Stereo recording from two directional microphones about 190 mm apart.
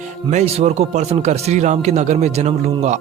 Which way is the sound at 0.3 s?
35° right (ahead or behind).